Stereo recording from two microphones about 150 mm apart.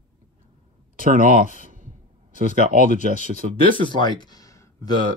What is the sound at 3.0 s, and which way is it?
Speech, 65° right (ahead or behind).